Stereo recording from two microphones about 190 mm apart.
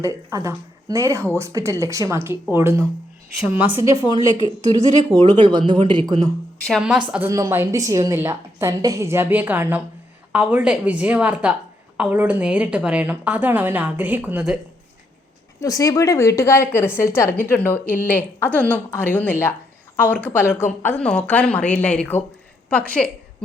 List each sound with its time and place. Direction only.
0.0 s a woman's voice: 15° right (ahead or behind)
5.1 s speech: 25° right (ahead or behind)
6.6 s speech: 5° left (ahead or behind)
7.1 s a woman's voice: 10° right (ahead or behind)
15.6 s a woman's voice: 20° left (ahead or behind)